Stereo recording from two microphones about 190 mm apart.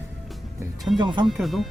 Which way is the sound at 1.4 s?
Centre (ahead or behind).